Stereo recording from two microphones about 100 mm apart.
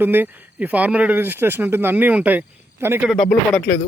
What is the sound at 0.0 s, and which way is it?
Speech, 20° right (ahead or behind).